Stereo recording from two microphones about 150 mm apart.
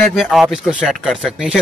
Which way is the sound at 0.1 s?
Centre (ahead or behind).